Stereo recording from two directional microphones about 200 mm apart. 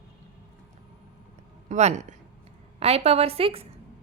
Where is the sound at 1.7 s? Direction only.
35° right (ahead or behind).